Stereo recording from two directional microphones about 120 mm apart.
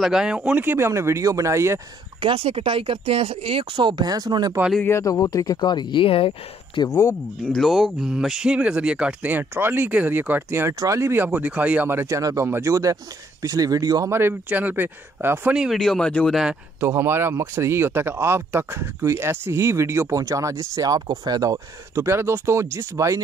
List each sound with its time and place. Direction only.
0.0 s speech: 5° right (ahead or behind); by 1.8 s 25° right (ahead or behind)
2.1 s speech: 50° right (ahead or behind); by 4.6 s 35° right (ahead or behind)
4.8 s speech: 25° left (ahead or behind); by 6.8 s 50° left (ahead or behind)
6.8 s speech: 30° left (ahead or behind)
7.4 s speech: centre (ahead or behind); by 14.1 s 30° right (ahead or behind)
14.1 s speech: 15° right (ahead or behind)
15.5 s speech: 5° right (ahead or behind)
15.8 s speech: 5° left (ahead or behind)
16.8 s speech: 20° right (ahead or behind)